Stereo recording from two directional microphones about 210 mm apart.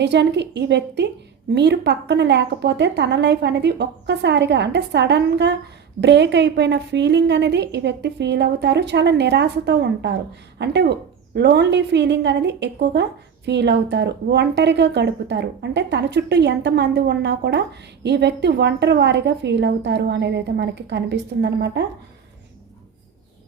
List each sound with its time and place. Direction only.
0.0 s a woman's voice: 55° right (ahead or behind)